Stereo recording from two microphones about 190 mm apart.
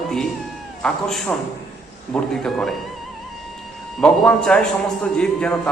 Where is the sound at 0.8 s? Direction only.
5° left (ahead or behind).